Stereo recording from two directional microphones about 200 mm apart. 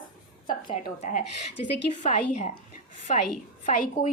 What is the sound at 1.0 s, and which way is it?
A woman's voice, 35° left (ahead or behind).